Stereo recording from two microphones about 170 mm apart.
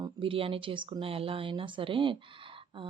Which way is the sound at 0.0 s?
30° right (ahead or behind).